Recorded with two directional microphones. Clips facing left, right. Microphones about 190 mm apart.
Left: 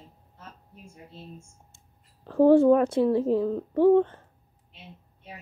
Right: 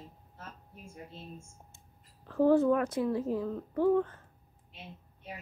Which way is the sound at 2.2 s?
30° left (ahead or behind).